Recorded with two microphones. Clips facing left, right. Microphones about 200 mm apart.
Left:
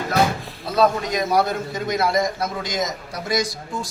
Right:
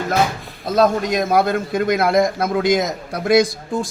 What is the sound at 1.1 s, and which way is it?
A man's voice, 50° right (ahead or behind).